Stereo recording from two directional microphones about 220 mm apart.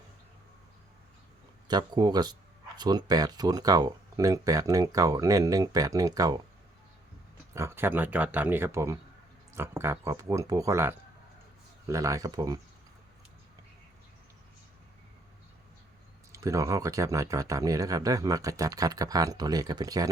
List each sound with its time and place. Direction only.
1.6 s speech: 20° right (ahead or behind)
7.5 s speech: 10° right (ahead or behind)
16.3 s speech: 15° right (ahead or behind)